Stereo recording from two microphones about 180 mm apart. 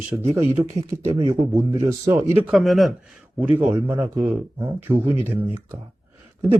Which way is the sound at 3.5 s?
15° right (ahead or behind).